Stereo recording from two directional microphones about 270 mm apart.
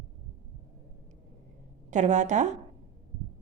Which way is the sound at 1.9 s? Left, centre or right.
Right.